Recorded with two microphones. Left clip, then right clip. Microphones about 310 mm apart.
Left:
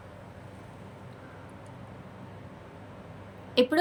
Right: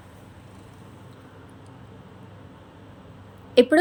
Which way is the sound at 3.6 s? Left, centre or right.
Centre.